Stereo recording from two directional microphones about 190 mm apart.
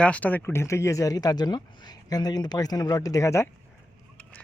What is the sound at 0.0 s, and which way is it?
Speech, 5° left (ahead or behind).